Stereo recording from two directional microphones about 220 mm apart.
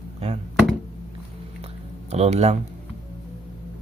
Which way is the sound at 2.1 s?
30° right (ahead or behind).